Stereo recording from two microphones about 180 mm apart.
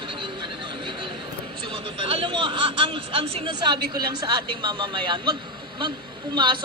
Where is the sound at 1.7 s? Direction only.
30° right (ahead or behind).